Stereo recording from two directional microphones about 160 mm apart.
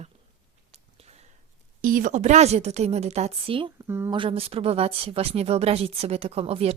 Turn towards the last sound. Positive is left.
turn(degrees=-40)  # may be behind; listen again after turning